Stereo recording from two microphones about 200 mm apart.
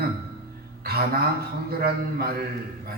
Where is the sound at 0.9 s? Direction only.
50° right (ahead or behind).